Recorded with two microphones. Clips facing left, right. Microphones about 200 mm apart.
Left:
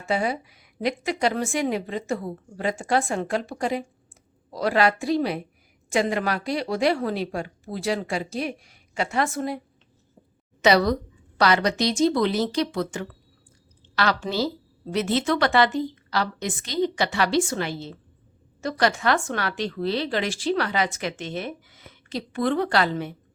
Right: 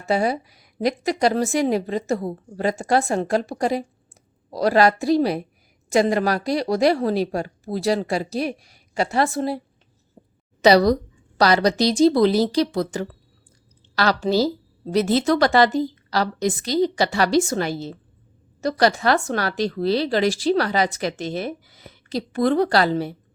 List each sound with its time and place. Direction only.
0.0 s speech: 35° right (ahead or behind)
10.6 s a woman's voice: 35° right (ahead or behind)